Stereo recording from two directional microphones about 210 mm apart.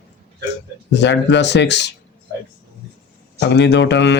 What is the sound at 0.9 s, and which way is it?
Speech, 55° left (ahead or behind).